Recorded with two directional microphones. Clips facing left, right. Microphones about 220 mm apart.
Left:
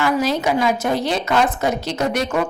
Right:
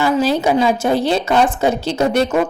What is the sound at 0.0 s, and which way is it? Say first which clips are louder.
A woman's voice: right 3 dB; 30° right (ahead or behind).